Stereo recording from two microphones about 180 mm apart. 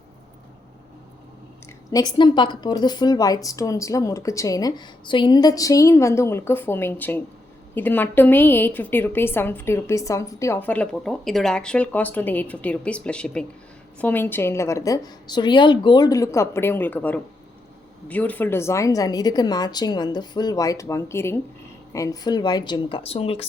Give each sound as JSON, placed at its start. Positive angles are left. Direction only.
{"t": 1.9, "sound": "a woman's voice", "side_deg": 20}